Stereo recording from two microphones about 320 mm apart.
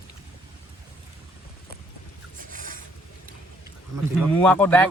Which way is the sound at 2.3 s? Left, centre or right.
Right.